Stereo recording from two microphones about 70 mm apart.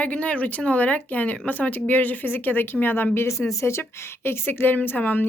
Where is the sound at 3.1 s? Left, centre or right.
Left.